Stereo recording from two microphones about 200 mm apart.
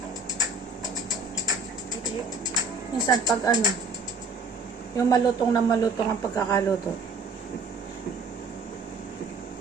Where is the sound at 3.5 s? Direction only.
20° right (ahead or behind).